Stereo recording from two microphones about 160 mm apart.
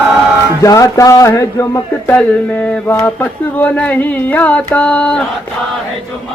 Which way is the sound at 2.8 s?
10° left (ahead or behind).